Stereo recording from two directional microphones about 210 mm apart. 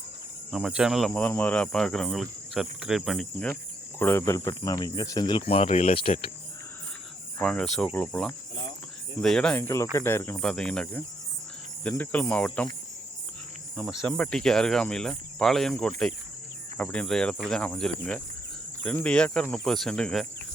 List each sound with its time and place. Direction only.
0.5 s speech: 5° right (ahead or behind)
3.9 s insect: 10° left (ahead or behind)
4.3 s speech: 15° left (ahead or behind)
7.3 s speech: 5° left (ahead or behind)
13.7 s speech: centre (ahead or behind)